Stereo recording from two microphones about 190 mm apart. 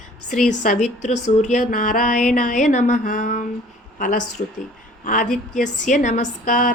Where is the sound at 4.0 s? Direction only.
40° left (ahead or behind).